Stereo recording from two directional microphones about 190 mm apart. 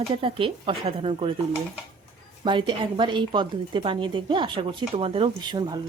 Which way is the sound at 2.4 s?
25° right (ahead or behind).